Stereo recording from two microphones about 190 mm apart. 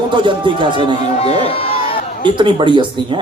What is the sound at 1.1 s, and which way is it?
Speech, 30° left (ahead or behind).